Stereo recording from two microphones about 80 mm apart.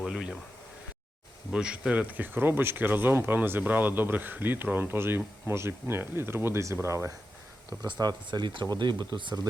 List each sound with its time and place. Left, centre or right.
0.0 s a sound: centre
1.5 s speech: centre; by 7.1 s right
7.9 s speech: right